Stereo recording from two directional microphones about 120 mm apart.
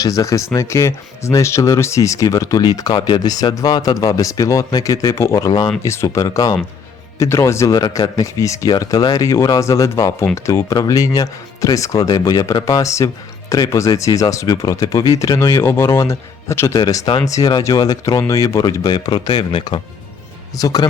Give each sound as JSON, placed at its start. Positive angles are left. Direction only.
{"t": 0.0, "sound": "speech", "side_deg": 25}
{"t": 20.6, "sound": "speech", "side_deg": 30}